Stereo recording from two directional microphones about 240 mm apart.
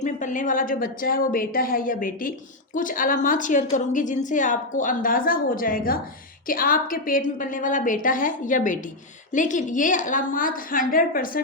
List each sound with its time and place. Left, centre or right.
0.0 s a woman's voice: left